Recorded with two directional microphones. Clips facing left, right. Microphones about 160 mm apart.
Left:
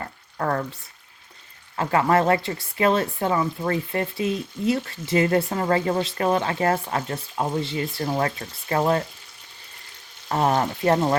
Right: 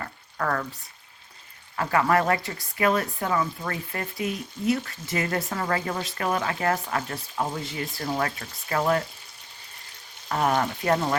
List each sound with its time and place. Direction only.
0.0 s frying: 30° left (ahead or behind)
1.7 s speech: 30° left (ahead or behind)
10.2 s speech: 30° left (ahead or behind)